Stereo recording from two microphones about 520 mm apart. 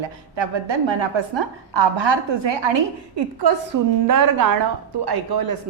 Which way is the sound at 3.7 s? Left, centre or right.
Right.